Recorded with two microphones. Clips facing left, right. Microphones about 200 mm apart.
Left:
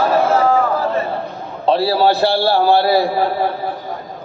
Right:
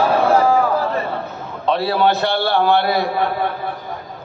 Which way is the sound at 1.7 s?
30° left (ahead or behind).